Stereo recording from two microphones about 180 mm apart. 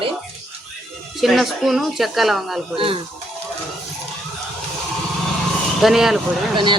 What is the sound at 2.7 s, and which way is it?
Speech, 30° right (ahead or behind).